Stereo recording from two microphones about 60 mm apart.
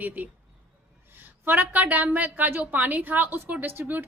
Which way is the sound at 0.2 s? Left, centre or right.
Right.